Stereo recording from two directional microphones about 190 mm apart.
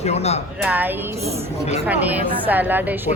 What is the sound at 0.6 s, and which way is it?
A woman's voice, 10° right (ahead or behind).